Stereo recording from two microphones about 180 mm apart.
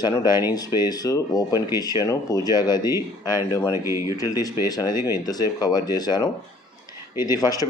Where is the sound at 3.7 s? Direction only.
15° right (ahead or behind).